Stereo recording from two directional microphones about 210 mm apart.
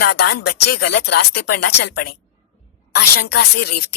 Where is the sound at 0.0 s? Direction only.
50° left (ahead or behind).